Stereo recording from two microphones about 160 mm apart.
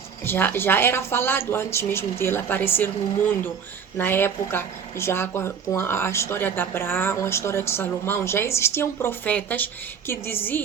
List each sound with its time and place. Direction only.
0.3 s speech: 15° left (ahead or behind)